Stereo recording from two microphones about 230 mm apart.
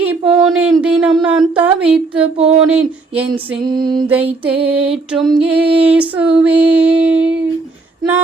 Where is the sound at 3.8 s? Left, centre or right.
Centre.